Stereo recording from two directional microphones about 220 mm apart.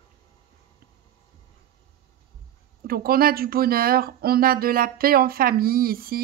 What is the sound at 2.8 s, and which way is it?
A woman's voice, 45° right (ahead or behind).